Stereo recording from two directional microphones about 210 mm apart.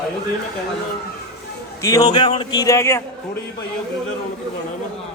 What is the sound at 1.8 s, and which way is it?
Speech, 15° left (ahead or behind).